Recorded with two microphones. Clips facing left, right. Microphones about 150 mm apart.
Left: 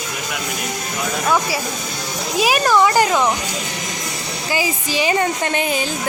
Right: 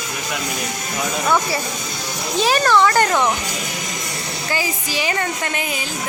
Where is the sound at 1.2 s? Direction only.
5° left (ahead or behind).